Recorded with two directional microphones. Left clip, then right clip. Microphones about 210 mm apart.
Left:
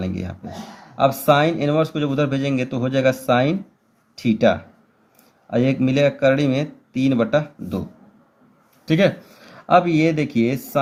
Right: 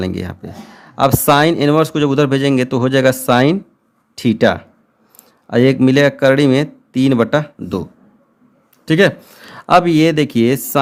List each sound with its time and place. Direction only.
0.0 s speech: 45° right (ahead or behind)